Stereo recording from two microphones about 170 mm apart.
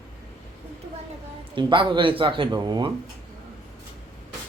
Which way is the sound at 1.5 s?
30° right (ahead or behind).